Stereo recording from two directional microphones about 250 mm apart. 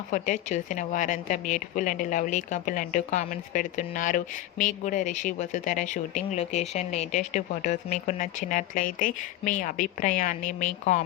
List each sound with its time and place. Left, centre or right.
0.1 s a woman's voice: left